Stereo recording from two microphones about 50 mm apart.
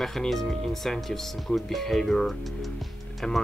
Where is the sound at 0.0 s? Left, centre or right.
Centre.